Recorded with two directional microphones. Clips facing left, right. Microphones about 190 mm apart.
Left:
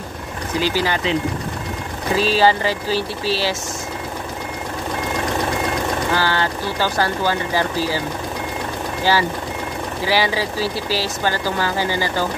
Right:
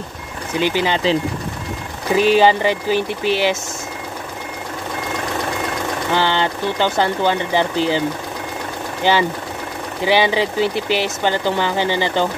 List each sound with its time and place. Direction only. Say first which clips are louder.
0.6 s speech: right 2 dB; 20° right (ahead or behind)
2.1 s speech: right 3 dB; 20° right (ahead or behind)
6.1 s speech: right 2 dB; 20° right (ahead or behind)
10.0 s speech: right 4 dB; 20° right (ahead or behind)